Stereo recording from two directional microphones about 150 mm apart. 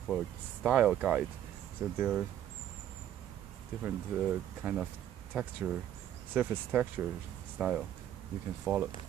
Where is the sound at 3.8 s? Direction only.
10° right (ahead or behind).